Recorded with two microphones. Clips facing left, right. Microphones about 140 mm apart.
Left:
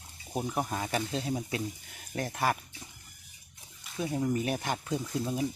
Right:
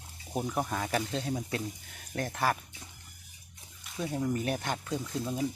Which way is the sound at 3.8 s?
5° left (ahead or behind).